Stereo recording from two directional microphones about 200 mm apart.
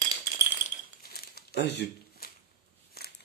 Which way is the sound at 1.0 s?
50° left (ahead or behind).